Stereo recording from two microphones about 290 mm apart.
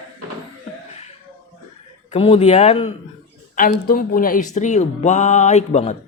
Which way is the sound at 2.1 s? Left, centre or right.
Centre.